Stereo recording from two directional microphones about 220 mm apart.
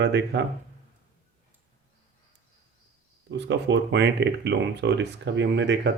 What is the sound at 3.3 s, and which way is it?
Speech, 55° right (ahead or behind).